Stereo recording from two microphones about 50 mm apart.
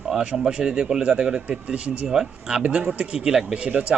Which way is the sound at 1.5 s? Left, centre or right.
Right.